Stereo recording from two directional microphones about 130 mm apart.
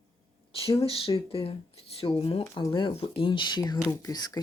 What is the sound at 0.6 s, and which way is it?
Speech, 45° left (ahead or behind).